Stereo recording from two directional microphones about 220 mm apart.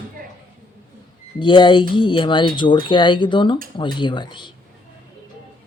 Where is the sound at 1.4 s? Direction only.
20° left (ahead or behind).